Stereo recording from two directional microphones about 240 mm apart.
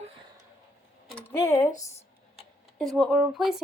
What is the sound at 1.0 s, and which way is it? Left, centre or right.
Speech, centre.